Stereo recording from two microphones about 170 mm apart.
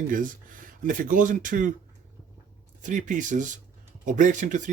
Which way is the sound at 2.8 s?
50° right (ahead or behind).